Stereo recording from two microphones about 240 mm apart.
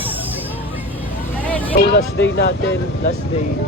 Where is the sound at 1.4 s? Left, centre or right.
Centre.